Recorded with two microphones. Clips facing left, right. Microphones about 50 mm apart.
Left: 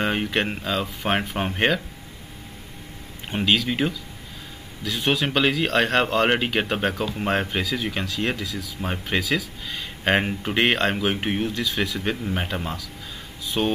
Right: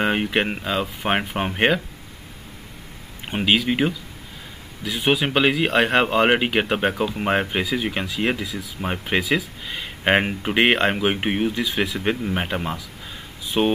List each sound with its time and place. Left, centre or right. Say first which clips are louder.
0.0 s speech: right 2 dB; centre
3.3 s speech: right 2 dB; centre
13.5 s speech: right 4 dB; right